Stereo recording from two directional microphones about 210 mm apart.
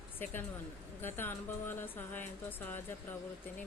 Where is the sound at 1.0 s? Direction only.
10° left (ahead or behind).